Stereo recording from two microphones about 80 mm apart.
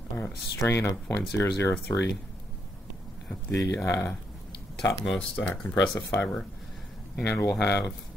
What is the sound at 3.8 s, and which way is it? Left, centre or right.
Speech, left.